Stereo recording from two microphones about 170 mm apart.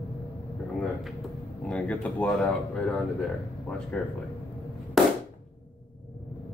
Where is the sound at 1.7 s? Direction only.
10° left (ahead or behind).